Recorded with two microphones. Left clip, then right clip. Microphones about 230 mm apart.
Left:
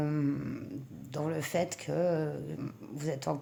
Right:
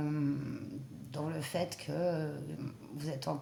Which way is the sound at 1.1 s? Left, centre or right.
Left.